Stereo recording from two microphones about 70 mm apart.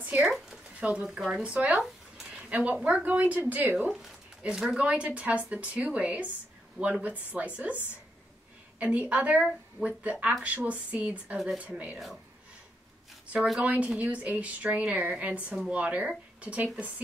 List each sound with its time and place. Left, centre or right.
0.0 s a sound: right
0.7 s speech: right
4.4 s a woman's voice: centre
13.6 s speech: centre